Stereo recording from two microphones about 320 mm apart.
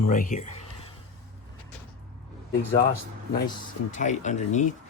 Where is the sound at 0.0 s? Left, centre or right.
Left.